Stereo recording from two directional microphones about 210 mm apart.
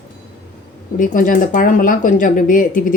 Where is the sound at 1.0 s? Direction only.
40° left (ahead or behind).